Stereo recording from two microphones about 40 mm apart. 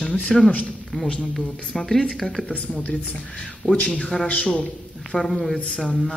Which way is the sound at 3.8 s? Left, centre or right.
Left.